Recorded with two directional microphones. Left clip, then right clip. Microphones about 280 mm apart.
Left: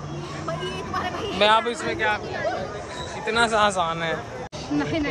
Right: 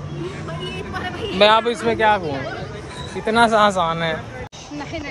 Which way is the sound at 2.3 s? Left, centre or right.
Centre.